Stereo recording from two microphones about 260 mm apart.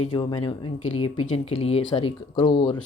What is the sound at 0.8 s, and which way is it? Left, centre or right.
Speech, left.